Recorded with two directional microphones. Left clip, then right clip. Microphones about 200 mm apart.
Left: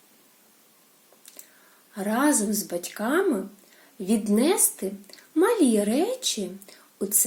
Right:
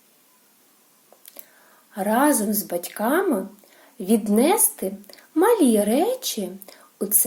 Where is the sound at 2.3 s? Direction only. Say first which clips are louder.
Right 2 dB; 10° right (ahead or behind).